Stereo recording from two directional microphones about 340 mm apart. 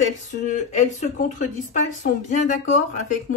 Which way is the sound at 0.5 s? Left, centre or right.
Left.